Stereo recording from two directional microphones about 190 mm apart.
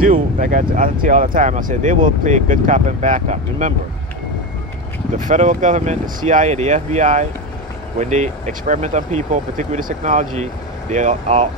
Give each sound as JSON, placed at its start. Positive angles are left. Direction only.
{"t": 0.1, "sound": "speech", "side_deg": -45}
{"t": 5.1, "sound": "speech", "side_deg": -40}